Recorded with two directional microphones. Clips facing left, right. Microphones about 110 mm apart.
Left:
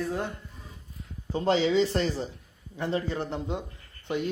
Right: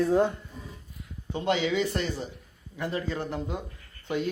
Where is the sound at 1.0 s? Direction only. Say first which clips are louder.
Left 3 dB; 35° left (ahead or behind).